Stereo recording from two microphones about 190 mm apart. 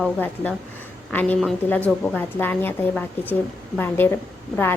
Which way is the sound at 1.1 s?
5° left (ahead or behind).